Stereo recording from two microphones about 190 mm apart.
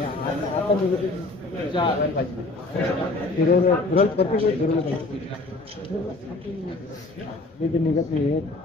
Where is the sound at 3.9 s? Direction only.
30° left (ahead or behind).